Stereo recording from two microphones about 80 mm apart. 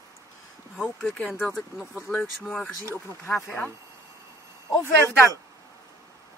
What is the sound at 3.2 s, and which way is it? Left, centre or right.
Speech, left.